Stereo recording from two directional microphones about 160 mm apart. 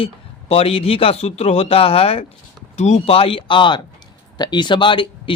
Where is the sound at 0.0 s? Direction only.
35° left (ahead or behind).